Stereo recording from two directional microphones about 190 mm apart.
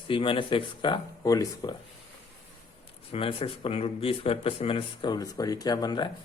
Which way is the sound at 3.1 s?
30° left (ahead or behind).